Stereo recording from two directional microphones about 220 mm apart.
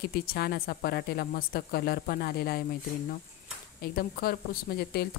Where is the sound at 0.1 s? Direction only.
45° left (ahead or behind).